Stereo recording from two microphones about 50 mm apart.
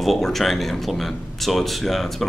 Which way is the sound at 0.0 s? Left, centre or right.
Centre.